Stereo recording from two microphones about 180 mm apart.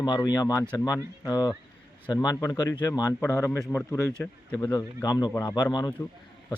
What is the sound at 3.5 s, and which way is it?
Speech, centre (ahead or behind).